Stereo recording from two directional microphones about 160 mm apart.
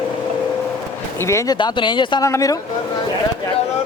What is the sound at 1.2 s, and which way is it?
Speech, 20° left (ahead or behind).